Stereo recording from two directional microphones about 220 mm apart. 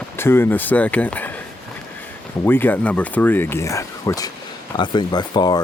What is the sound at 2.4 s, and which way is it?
Speech, 10° left (ahead or behind).